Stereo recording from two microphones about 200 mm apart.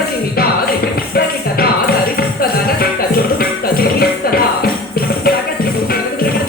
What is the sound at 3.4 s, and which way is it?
Music, 50° left (ahead or behind).